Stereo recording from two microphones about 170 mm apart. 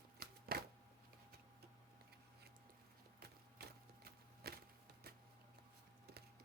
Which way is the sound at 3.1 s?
65° right (ahead or behind).